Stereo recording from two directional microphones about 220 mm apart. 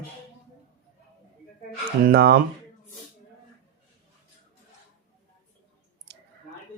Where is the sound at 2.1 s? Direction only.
45° right (ahead or behind).